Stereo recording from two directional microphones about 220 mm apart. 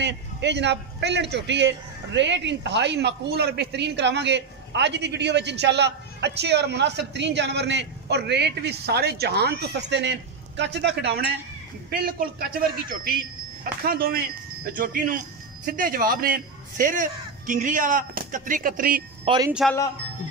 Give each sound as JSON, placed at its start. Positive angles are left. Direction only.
{"t": 0.0, "sound": "a man's voice", "side_deg": -50}
{"t": 13.8, "sound": "speech", "side_deg": -45}
{"t": 19.2, "sound": "speech", "side_deg": -20}